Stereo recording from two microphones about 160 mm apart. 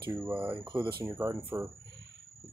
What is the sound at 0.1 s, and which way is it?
Speech, 10° right (ahead or behind).